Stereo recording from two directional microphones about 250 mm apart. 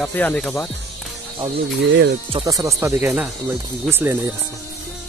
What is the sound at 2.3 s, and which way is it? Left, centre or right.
Speech, centre.